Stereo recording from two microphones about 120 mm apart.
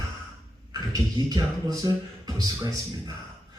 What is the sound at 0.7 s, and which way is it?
Speech, 35° right (ahead or behind).